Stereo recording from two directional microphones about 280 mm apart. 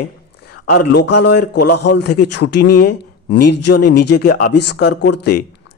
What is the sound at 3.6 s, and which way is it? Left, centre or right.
A man's voice, left.